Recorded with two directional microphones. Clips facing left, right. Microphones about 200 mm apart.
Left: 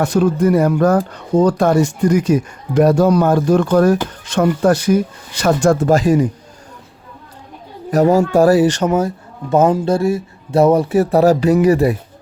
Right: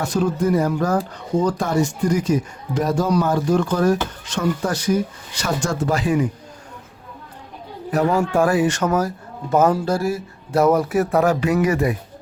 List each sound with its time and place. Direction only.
0.0 s speech: 65° left (ahead or behind); by 6.2 s 40° left (ahead or behind)
7.9 s speech: 40° left (ahead or behind)